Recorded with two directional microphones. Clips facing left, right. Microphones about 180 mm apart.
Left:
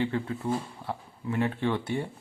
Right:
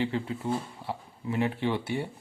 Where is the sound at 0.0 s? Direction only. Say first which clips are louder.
Left 1 dB; 25° right (ahead or behind).